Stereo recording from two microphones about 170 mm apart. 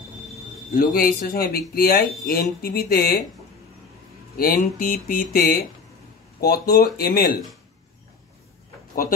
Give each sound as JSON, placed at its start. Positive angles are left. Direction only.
{"t": 0.7, "sound": "speech", "side_deg": 60}
{"t": 4.4, "sound": "speech", "side_deg": 60}